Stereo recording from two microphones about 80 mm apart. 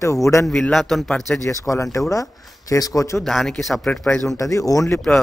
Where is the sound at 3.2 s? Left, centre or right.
Centre.